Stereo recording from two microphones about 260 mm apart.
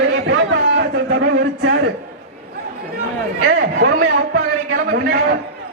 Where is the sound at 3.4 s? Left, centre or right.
Right.